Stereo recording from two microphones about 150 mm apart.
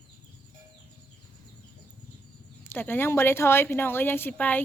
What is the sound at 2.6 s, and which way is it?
Speech, 15° left (ahead or behind).